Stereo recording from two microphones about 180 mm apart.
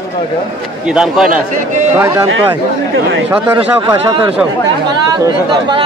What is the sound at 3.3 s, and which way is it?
A man's voice, 15° right (ahead or behind).